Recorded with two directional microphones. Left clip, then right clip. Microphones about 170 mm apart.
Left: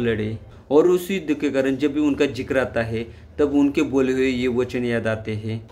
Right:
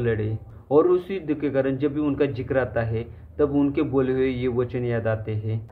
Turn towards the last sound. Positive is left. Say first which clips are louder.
# left 2 dB
turn(degrees=20)  # may be behind; listen again after turning